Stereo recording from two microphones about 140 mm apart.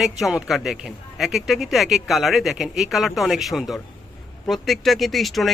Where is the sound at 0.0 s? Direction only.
Centre (ahead or behind).